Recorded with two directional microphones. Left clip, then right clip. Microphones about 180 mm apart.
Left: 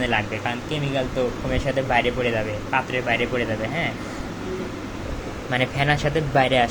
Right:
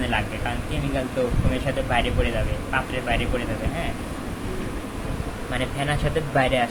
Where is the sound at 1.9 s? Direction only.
30° left (ahead or behind).